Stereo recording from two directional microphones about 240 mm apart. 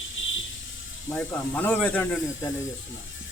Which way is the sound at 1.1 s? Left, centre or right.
Centre.